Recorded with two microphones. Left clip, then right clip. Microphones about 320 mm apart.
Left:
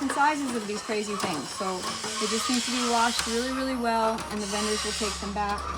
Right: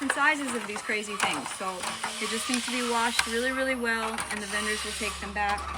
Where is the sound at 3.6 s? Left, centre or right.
Centre.